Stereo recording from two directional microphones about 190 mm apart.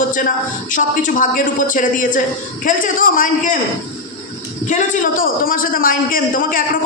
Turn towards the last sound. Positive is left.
turn(degrees=45)  # may be behind; listen again after turning